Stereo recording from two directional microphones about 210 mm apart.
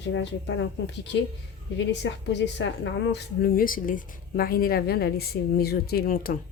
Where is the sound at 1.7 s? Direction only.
55° left (ahead or behind).